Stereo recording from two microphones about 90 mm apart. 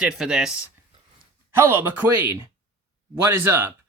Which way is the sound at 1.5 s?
25° right (ahead or behind).